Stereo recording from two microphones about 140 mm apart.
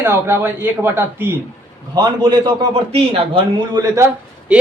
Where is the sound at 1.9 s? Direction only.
30° right (ahead or behind).